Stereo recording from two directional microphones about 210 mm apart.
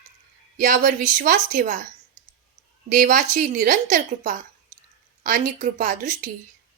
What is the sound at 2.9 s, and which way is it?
Speech, 40° right (ahead or behind).